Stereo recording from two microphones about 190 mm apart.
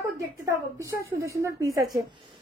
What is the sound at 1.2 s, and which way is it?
Speech, 15° right (ahead or behind).